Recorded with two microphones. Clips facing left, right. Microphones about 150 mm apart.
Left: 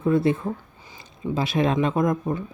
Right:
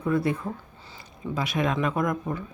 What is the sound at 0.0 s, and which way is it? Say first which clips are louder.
Speech: left 5 dB; 25° left (ahead or behind).